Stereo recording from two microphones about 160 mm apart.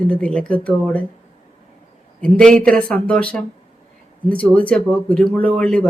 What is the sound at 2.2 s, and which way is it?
Speech, 5° left (ahead or behind).